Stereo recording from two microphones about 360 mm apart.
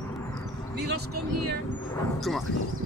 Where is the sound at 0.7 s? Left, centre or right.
Right.